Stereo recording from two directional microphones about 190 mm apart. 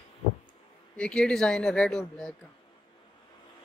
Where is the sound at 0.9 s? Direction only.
5° left (ahead or behind).